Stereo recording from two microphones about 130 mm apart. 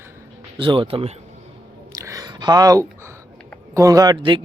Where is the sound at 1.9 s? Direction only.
25° right (ahead or behind).